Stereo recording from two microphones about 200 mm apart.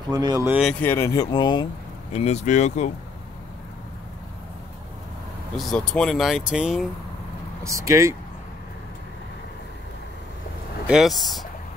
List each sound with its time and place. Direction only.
0.1 s speech: 15° right (ahead or behind)
0.5 s speech: centre (ahead or behind); by 1.7 s 20° left (ahead or behind)
2.1 s speech: 35° left (ahead or behind)
5.6 s speech: centre (ahead or behind)
7.6 s speech: 15° right (ahead or behind)
10.9 s speech: centre (ahead or behind)